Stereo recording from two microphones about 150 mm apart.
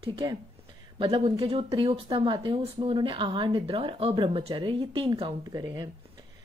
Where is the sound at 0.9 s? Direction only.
35° right (ahead or behind).